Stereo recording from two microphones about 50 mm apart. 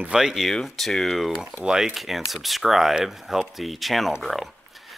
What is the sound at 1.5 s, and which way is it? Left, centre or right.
Speech, centre.